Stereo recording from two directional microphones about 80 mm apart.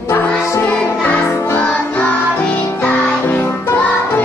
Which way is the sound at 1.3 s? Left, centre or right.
Left.